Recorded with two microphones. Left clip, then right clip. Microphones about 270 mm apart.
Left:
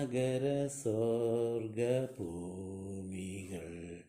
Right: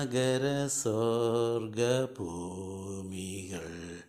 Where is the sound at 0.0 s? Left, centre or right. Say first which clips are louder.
Right 4 dB; centre.